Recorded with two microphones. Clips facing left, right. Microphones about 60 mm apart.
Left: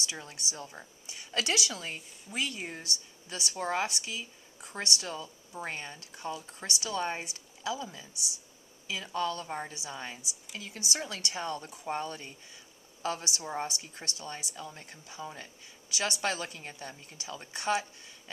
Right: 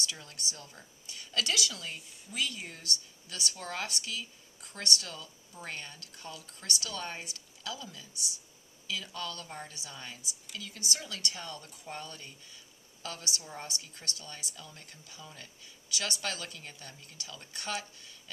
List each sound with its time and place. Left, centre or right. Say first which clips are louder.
0.0 s a woman's voice: left 1 dB; left